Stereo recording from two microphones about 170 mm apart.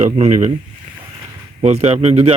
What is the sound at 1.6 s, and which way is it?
Speech, 40° right (ahead or behind).